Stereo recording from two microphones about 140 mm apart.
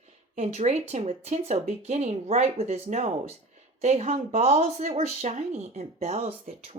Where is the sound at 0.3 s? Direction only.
50° right (ahead or behind).